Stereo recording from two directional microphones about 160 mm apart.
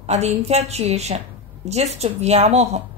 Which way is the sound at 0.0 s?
45° right (ahead or behind).